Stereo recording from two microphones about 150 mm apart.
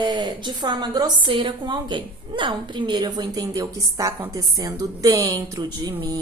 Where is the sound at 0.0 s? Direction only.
30° right (ahead or behind).